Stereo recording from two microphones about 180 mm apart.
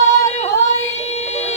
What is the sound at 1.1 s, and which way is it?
Music, 35° left (ahead or behind).